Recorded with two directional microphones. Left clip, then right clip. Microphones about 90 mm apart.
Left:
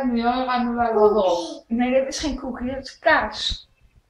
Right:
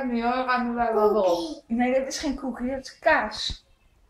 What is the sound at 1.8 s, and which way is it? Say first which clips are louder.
A woman's voice: left 3 dB; 55° right (ahead or behind).